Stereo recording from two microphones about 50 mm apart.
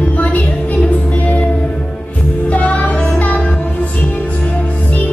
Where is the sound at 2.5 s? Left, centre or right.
Left.